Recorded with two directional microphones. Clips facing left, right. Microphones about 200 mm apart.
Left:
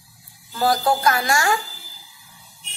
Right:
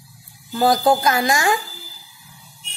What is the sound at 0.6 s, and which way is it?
Speech, 20° right (ahead or behind).